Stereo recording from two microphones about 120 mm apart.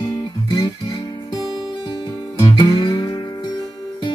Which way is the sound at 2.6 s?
35° left (ahead or behind).